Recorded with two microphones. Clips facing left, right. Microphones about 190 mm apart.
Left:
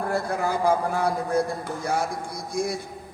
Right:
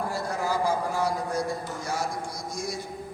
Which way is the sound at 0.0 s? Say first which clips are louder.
Left 4 dB; 55° left (ahead or behind).